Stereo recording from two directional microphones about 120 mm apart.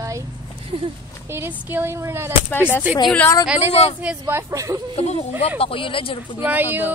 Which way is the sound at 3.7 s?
60° left (ahead or behind).